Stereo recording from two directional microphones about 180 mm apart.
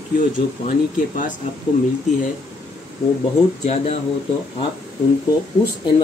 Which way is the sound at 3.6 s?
35° left (ahead or behind).